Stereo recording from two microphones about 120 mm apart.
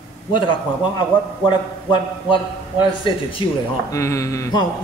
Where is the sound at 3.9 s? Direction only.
25° left (ahead or behind).